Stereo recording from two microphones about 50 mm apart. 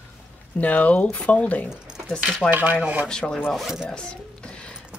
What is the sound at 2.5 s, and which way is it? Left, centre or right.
Speech, right.